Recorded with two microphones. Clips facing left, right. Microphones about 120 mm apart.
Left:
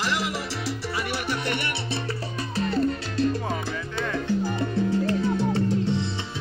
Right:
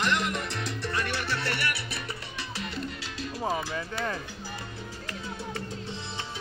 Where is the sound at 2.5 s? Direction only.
35° left (ahead or behind).